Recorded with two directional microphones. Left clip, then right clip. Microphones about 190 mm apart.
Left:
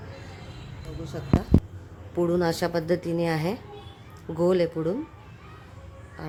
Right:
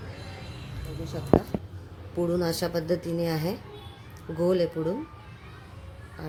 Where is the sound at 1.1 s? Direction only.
10° left (ahead or behind).